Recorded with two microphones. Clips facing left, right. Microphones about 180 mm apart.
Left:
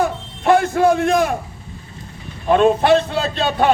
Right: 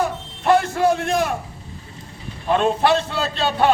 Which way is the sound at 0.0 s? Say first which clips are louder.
Left 3 dB; 50° left (ahead or behind).